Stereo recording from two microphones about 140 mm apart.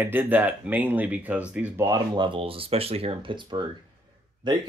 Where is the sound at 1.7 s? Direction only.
25° right (ahead or behind).